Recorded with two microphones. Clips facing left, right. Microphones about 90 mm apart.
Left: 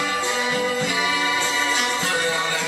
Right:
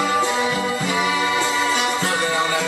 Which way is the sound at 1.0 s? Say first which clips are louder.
Right 3 dB; 20° right (ahead or behind).